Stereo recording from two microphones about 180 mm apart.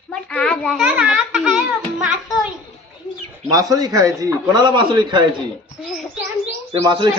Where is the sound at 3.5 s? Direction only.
20° right (ahead or behind).